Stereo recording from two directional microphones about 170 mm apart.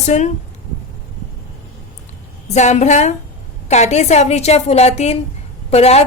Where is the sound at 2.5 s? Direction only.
40° left (ahead or behind).